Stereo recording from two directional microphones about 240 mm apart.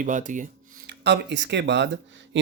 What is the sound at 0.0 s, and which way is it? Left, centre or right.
Speech, right.